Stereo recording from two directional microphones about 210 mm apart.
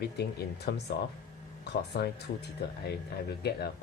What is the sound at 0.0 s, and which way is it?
Speech, 50° left (ahead or behind).